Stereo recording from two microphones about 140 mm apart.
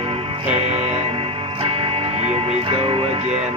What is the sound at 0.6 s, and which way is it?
Music, 50° right (ahead or behind).